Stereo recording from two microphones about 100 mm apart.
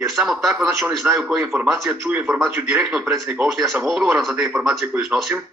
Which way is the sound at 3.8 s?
5° right (ahead or behind).